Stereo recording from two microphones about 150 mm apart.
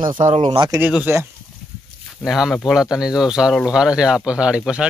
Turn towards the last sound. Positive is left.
turn(degrees=-5)  # may be behind; listen again after turning